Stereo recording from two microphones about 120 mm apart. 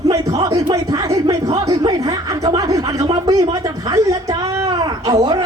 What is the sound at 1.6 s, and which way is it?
Chuckle, 30° right (ahead or behind).